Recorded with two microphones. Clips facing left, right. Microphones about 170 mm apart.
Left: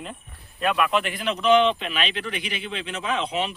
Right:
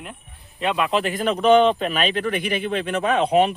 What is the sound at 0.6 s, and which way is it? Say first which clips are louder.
Speech: right 1 dB; 25° right (ahead or behind).